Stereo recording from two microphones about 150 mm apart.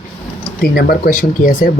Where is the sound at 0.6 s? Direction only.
85° left; by 1.7 s 70° left (ahead or behind).